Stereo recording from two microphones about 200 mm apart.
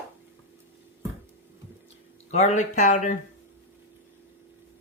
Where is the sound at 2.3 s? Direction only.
35° left (ahead or behind).